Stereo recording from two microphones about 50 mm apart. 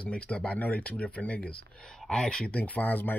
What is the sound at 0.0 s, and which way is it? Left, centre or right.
Speech, left.